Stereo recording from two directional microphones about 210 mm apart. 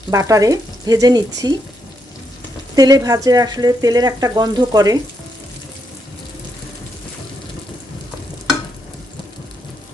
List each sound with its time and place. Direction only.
0.1 s speech: 15° right (ahead or behind)
2.7 s speech: 15° right (ahead or behind)